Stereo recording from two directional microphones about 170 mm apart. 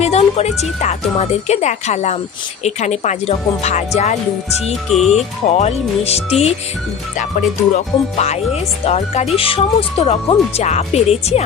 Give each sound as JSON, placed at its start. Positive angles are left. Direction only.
{"t": 0.0, "sound": "speech", "side_deg": 40}
{"t": 4.7, "sound": "speech", "side_deg": 0}
{"t": 5.5, "sound": "speech", "side_deg": 40}
{"t": 7.2, "sound": "music", "side_deg": 45}
{"t": 8.8, "sound": "speech", "side_deg": 40}